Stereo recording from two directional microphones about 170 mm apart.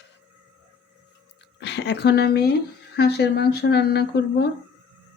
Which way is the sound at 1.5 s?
90° left.